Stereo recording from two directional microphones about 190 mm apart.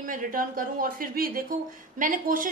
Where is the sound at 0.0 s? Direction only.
45° right (ahead or behind).